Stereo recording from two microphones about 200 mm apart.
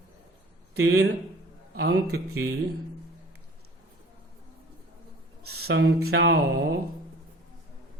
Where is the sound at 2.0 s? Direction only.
90° right.